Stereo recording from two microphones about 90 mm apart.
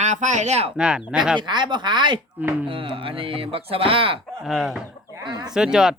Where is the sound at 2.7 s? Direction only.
85° right.